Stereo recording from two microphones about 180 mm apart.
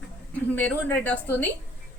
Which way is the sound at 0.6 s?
10° left (ahead or behind).